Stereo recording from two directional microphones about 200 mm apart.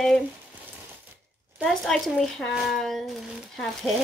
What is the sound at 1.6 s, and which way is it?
Speech, centre (ahead or behind).